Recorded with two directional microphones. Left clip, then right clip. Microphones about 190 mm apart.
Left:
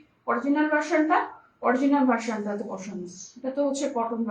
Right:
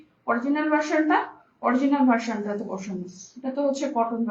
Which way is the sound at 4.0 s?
15° right (ahead or behind).